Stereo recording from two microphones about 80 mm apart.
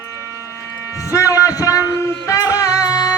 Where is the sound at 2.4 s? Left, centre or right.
Left.